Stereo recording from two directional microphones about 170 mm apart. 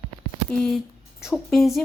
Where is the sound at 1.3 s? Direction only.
Centre (ahead or behind).